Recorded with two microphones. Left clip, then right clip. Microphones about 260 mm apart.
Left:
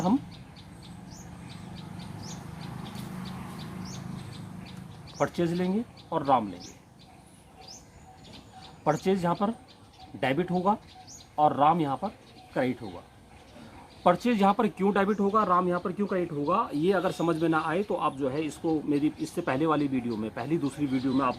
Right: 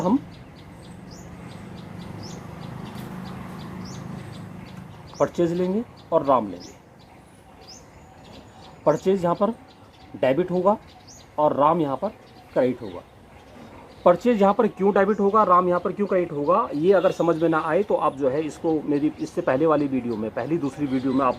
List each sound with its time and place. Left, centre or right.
5.1 s speech: left
8.8 s speech: left
14.0 s speech: left